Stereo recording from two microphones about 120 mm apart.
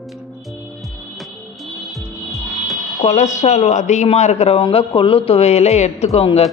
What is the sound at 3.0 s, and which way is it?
A man's voice, 70° left (ahead or behind).